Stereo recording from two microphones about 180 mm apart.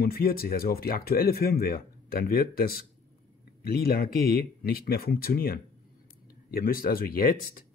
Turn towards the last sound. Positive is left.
turn(degrees=55)  # may be behind; listen again after turning